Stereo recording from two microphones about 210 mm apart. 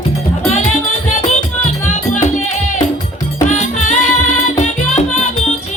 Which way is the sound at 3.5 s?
35° left (ahead or behind).